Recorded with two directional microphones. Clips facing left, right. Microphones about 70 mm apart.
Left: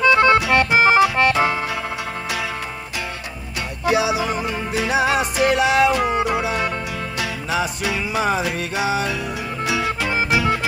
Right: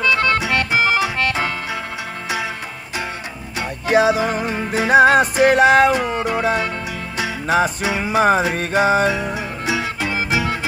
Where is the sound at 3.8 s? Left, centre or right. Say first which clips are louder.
Right 3 dB; right.